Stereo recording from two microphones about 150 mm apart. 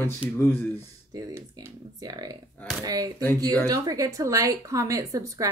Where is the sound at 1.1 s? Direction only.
20° right (ahead or behind).